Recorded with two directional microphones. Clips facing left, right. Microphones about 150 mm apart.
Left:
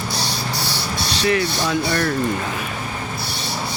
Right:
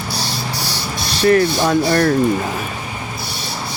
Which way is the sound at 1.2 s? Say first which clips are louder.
Right 7 dB; 45° right (ahead or behind).